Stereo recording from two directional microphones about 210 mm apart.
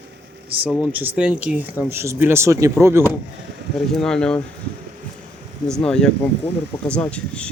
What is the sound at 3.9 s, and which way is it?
Speech, 5° left (ahead or behind).